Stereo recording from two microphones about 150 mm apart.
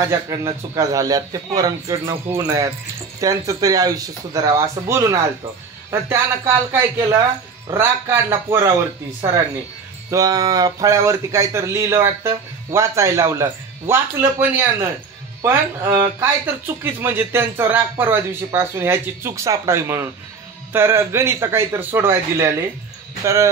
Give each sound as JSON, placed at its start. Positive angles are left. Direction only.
{"t": 0.1, "sound": "a man's voice", "side_deg": -20}
{"t": 10.1, "sound": "a man's voice", "side_deg": -25}